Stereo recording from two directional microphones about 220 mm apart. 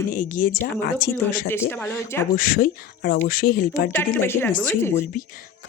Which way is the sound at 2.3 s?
40° left (ahead or behind).